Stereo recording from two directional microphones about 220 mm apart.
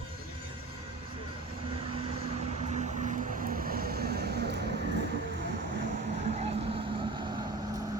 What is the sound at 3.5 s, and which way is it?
Vehicle, 40° right (ahead or behind).